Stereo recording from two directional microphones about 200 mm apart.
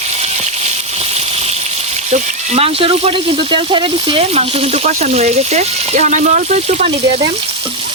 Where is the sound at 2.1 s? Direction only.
30° right (ahead or behind).